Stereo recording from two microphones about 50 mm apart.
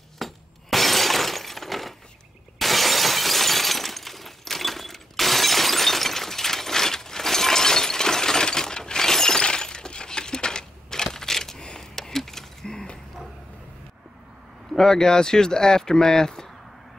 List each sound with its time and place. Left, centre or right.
0.2 s shatter: centre
14.8 s speech: centre